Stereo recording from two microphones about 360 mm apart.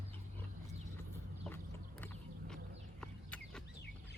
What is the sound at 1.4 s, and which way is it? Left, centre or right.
Horse, centre.